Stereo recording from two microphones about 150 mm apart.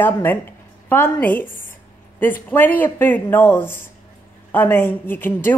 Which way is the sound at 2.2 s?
10° left (ahead or behind).